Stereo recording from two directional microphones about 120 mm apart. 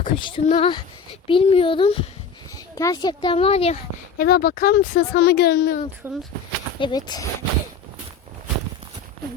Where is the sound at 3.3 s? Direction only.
55° left (ahead or behind).